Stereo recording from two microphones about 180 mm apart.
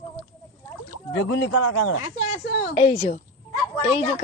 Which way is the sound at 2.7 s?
35° left (ahead or behind).